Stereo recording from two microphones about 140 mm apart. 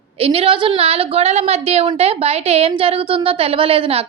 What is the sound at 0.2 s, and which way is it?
A woman's voice, 45° right (ahead or behind).